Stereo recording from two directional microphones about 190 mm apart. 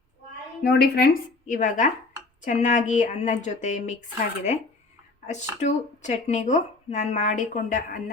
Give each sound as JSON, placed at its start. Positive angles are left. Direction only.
{"t": 0.6, "sound": "speech", "side_deg": 55}
{"t": 5.2, "sound": "speech", "side_deg": 40}